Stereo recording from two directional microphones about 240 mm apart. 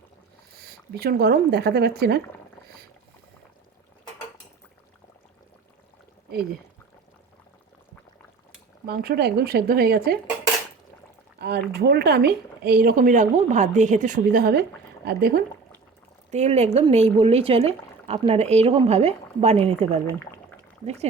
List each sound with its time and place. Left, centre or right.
0.5 s speech: right
8.9 s speech: right
11.3 s speech: right
16.3 s speech: right
20.1 s speech: centre
20.8 s speech: right